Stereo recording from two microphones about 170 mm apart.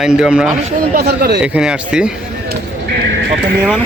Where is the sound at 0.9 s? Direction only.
70° right (ahead or behind).